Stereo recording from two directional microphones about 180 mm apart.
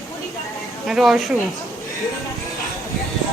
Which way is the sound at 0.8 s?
Centre (ahead or behind).